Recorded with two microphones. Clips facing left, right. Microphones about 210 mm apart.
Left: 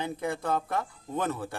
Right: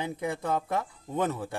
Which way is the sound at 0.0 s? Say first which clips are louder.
Even; 20° right (ahead or behind).